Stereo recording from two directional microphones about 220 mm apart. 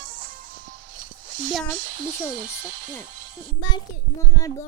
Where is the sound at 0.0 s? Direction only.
40° right (ahead or behind).